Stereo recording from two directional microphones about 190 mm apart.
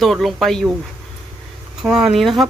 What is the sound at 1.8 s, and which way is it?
Speech, 5° right (ahead or behind).